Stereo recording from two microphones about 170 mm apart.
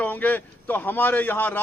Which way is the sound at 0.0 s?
10° left (ahead or behind).